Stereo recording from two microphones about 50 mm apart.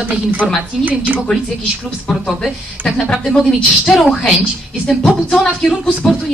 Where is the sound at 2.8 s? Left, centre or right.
Right.